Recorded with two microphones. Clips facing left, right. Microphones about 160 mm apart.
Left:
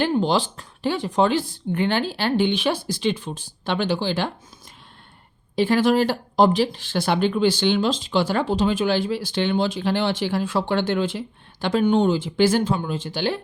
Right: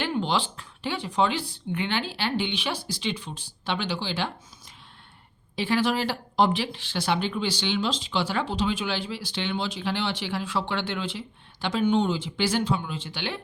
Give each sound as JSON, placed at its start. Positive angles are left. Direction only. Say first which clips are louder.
{"t": 0.2, "sound": "speech", "louder": "left 6 dB", "side_deg": 40}
{"t": 5.5, "sound": "speech", "louder": "left 7 dB", "side_deg": 45}